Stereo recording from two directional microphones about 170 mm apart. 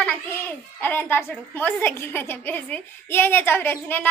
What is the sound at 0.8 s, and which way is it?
A woman's voice, 10° left (ahead or behind).